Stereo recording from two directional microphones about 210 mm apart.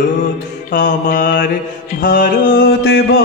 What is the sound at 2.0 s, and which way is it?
Music, 40° left (ahead or behind).